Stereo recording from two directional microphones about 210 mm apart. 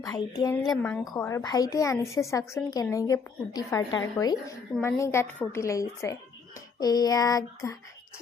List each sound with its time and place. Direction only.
0.0 s speech: 15° left (ahead or behind)